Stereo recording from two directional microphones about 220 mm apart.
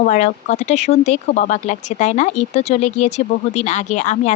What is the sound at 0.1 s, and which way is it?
Speech, 35° left (ahead or behind).